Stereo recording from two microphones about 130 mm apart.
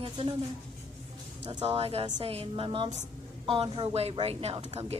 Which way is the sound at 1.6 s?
50° right (ahead or behind).